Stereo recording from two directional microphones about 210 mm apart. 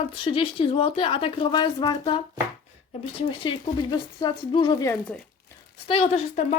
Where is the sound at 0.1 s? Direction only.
25° left (ahead or behind).